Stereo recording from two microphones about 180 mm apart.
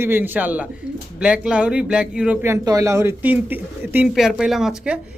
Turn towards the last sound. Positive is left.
turn(degrees=0)  # may be behind; listen again after turning